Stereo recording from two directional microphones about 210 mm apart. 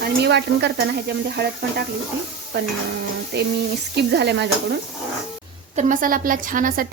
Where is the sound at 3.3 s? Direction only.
55° right (ahead or behind).